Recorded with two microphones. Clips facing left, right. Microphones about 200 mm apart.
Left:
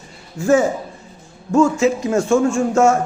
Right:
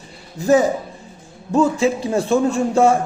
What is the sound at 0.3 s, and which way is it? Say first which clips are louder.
Speech: even; 35° right (ahead or behind).